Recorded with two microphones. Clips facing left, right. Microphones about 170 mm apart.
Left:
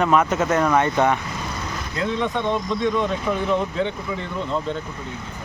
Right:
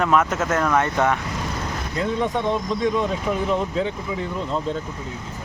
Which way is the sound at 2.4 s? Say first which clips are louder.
Even; 10° right (ahead or behind).